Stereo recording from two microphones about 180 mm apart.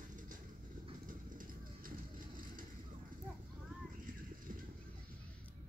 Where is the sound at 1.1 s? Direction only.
50° right (ahead or behind).